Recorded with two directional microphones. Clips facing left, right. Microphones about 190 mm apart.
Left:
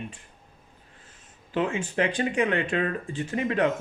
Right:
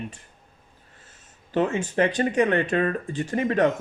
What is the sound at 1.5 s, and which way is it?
Speech, 40° right (ahead or behind).